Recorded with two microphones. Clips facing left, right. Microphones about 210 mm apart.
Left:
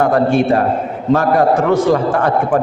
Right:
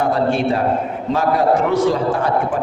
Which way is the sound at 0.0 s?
50° left (ahead or behind).